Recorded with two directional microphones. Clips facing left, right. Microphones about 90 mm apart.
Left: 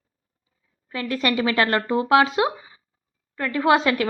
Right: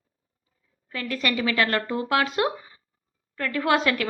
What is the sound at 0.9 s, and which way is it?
A woman's voice, 30° left (ahead or behind).